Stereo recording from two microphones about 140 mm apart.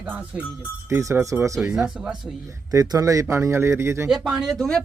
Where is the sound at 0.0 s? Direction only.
10° right (ahead or behind).